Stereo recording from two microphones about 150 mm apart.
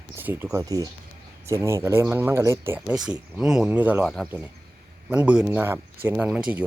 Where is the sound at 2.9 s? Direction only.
5° right (ahead or behind).